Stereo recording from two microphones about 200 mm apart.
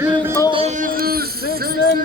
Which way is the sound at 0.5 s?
35° right (ahead or behind).